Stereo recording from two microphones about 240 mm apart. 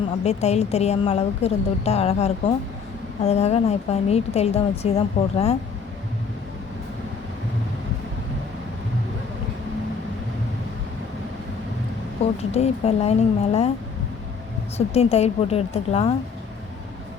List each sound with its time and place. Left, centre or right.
0.3 s speech: left
12.5 s speech: left
14.8 s speech: left